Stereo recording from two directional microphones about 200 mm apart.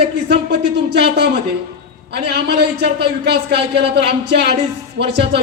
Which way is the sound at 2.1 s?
55° right (ahead or behind).